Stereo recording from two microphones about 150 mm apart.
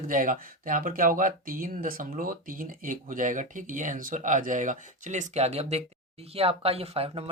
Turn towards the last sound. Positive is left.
turn(degrees=-40)  # may be behind; listen again after turning